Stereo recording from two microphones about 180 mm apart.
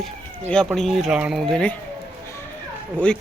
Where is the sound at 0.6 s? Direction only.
Centre (ahead or behind).